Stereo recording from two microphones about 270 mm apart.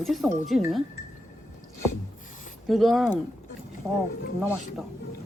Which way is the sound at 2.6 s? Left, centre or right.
Centre.